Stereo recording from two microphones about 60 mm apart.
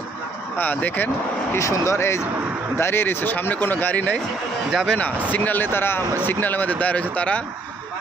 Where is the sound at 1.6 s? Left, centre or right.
Left.